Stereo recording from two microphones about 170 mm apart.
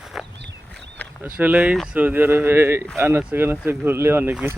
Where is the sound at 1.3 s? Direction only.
10° right (ahead or behind).